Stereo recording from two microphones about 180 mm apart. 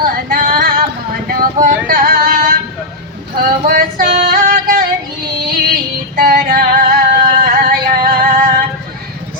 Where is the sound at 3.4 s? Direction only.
50° right (ahead or behind).